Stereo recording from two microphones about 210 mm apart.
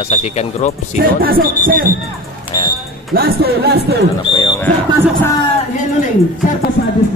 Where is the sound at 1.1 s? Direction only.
45° right (ahead or behind).